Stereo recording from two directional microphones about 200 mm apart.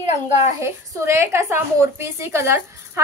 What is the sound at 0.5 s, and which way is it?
A woman's voice, 15° right (ahead or behind).